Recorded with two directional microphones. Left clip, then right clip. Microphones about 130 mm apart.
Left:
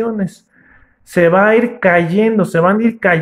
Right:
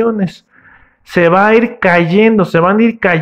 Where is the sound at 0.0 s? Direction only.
20° right (ahead or behind).